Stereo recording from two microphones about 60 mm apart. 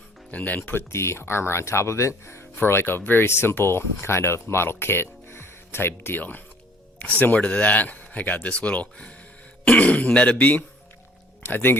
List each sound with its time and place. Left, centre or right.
0.3 s speech: left
0.9 s speech: left